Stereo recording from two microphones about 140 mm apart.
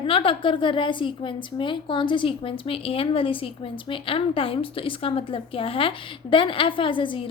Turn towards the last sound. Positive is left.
turn(degrees=35)  # may be behind; listen again after turning